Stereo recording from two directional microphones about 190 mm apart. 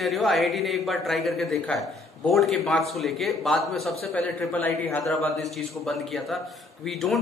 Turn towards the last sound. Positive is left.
turn(degrees=0)  # may be behind; listen again after turning